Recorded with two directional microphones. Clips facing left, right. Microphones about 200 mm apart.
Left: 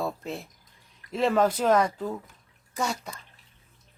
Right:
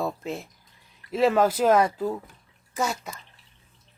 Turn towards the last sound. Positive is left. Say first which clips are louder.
# right 2 dB
turn(degrees=0)  # may be behind; listen again after turning